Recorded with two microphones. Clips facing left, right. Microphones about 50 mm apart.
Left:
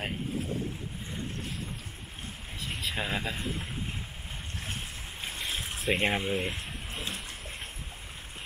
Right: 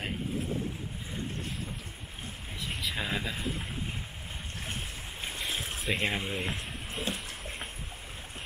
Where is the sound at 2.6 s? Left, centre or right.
Centre.